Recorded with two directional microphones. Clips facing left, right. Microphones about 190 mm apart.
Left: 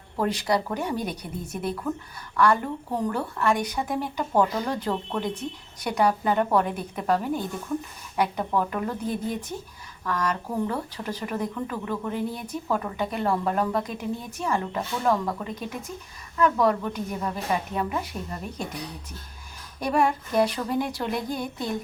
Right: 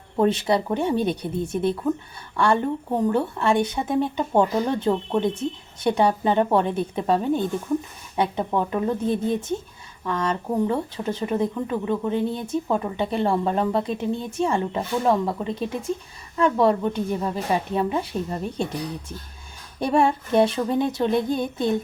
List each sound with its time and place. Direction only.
0.2 s speech: 25° right (ahead or behind)